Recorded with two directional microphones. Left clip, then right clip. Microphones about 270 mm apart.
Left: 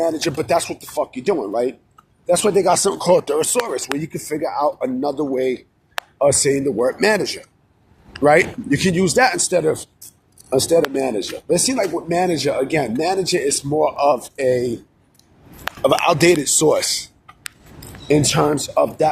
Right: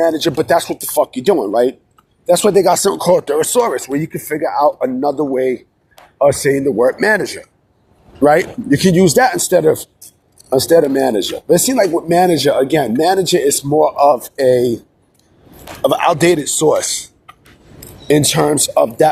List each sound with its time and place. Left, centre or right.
0.0 s speech: right
0.8 s speech: right; by 7.3 s centre
8.2 s speech: right
16.1 s speech: centre
17.3 s a sound: right
18.1 s speech: right